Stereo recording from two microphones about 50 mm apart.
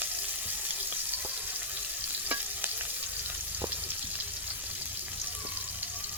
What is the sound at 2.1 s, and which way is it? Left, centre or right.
Stir, right.